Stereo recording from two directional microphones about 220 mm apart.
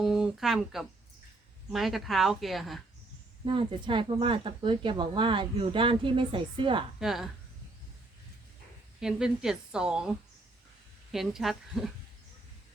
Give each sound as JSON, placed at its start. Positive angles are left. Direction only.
{"t": 0.0, "sound": "a woman's voice", "side_deg": 0}
{"t": 3.4, "sound": "speech", "side_deg": -25}
{"t": 7.0, "sound": "a woman's voice", "side_deg": 0}
{"t": 9.0, "sound": "a woman's voice", "side_deg": -5}